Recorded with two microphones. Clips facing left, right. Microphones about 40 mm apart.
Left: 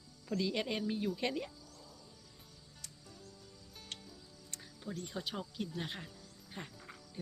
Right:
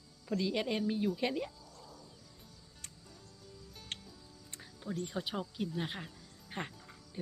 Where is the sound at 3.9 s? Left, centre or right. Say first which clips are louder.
Right 4 dB; right.